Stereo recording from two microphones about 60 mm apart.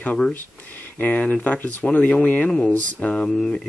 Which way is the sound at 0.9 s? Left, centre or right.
Left.